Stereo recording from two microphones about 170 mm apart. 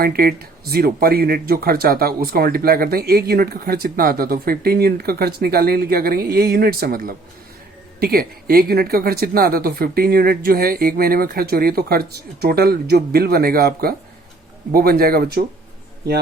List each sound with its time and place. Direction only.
0.0 s speech: 65° right (ahead or behind)